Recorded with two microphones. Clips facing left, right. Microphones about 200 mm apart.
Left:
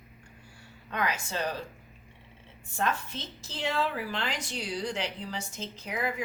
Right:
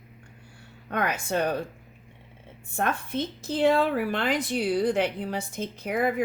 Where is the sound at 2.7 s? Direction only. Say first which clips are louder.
Right 4 dB; 55° right (ahead or behind).